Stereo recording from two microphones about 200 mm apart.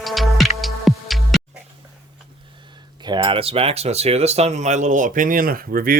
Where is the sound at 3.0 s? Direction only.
25° right (ahead or behind).